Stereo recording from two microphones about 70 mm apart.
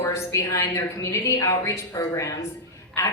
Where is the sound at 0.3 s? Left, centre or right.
Left.